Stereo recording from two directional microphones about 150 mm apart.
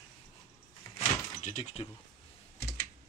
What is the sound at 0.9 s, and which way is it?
Door, 50° left (ahead or behind).